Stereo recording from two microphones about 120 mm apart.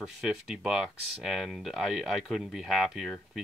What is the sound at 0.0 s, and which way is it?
Speech, 5° right (ahead or behind).